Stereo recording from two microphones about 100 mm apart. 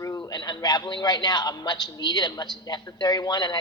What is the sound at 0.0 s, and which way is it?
A man's voice, 40° left (ahead or behind).